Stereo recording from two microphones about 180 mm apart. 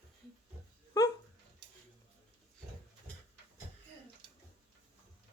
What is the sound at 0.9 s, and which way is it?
Dog, 20° left (ahead or behind).